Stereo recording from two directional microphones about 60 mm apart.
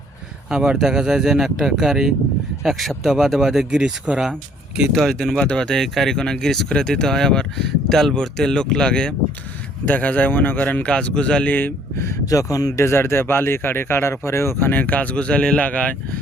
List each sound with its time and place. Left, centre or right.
0.5 s speech: centre
5.0 s speech: centre
5.8 s speech: centre
9.8 s speech: left
10.8 s speech: centre
11.4 s speech: left
12.2 s speech: left
12.8 s speech: left
14.6 s speech: left